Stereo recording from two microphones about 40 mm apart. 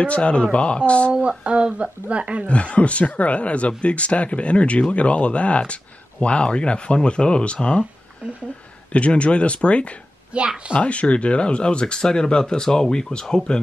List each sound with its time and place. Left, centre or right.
0.0 s speech: left
1.4 s speech: right
2.4 s speech: left
8.9 s speech: left
10.3 s a woman's voice: right
10.7 s speech: left; by 13.6 s centre